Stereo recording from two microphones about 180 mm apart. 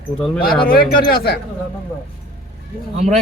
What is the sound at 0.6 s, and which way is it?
Speech, 55° left (ahead or behind).